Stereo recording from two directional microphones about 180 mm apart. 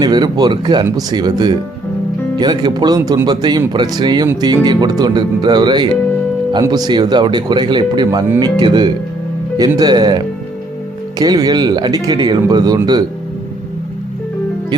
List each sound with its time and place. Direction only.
0.0 s speech: 25° right (ahead or behind)